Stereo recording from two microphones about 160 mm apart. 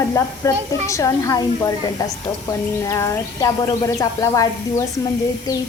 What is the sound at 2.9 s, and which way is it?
A woman's voice, 15° left (ahead or behind).